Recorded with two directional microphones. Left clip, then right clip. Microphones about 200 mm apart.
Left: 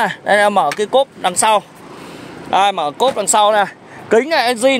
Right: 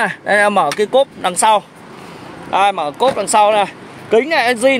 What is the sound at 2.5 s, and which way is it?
Speech, 35° left (ahead or behind).